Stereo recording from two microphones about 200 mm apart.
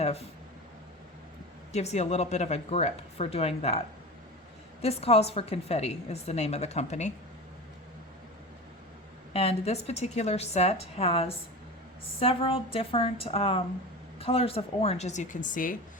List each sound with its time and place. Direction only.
0.0 s speech: 30° left (ahead or behind)
1.7 s a woman's voice: 35° left (ahead or behind)
9.3 s a woman's voice: 30° left (ahead or behind)